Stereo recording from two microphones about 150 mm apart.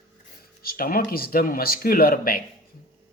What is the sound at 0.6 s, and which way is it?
Speech, 80° left.